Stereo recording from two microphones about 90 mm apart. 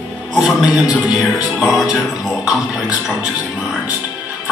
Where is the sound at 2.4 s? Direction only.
5° right (ahead or behind).